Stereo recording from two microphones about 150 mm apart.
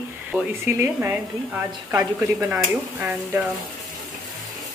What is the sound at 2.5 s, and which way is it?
Stir, 5° right (ahead or behind).